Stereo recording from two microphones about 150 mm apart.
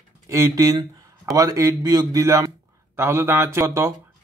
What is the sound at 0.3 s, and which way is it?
A man's voice, 20° right (ahead or behind).